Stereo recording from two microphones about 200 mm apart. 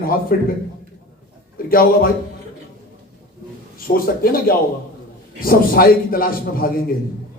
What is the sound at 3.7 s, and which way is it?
Speech, 45° left (ahead or behind).